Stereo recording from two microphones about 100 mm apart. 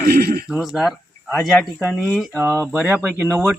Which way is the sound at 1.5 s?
10° left (ahead or behind).